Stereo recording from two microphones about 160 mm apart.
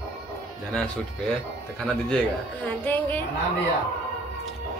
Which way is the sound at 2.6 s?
10° left (ahead or behind).